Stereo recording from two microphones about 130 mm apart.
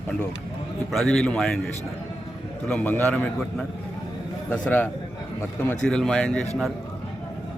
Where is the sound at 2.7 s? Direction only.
10° left (ahead or behind).